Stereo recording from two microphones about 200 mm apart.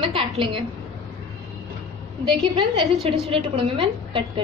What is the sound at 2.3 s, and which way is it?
A woman's voice, 25° right (ahead or behind).